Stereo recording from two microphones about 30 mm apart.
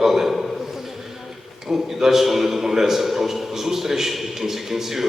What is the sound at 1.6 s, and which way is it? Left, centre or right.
A man's voice, centre.